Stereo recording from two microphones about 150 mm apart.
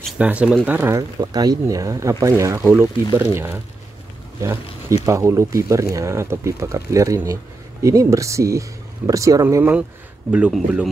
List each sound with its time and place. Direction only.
0.2 s speech: 10° right (ahead or behind)
5.0 s speech: 20° right (ahead or behind)